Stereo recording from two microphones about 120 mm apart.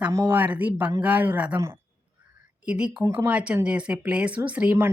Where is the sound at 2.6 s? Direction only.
10° right (ahead or behind).